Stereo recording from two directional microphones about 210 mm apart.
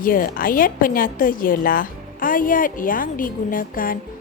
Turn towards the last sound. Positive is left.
turn(degrees=40)  # may be behind; listen again after turning